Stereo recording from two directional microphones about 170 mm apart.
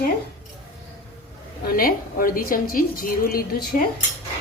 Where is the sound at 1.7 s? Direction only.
60° left (ahead or behind).